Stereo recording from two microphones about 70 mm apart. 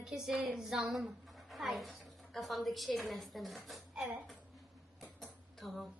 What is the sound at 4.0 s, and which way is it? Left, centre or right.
Speech, centre.